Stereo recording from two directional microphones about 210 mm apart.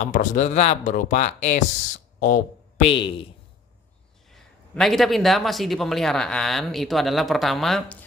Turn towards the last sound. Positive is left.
turn(degrees=0)  # may be behind; listen again after turning